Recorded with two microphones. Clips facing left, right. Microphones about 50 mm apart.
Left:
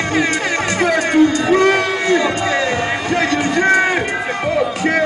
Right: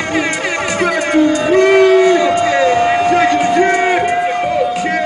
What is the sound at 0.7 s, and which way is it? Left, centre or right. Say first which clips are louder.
Speech: even; right.